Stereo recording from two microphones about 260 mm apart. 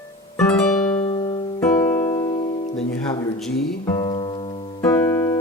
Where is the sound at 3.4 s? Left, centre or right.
Centre.